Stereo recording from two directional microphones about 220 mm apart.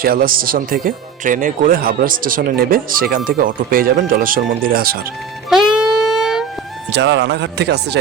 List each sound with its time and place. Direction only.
0.0 s speech: 40° right (ahead or behind)
5.5 s music: centre (ahead or behind)
6.9 s speech: 55° right (ahead or behind)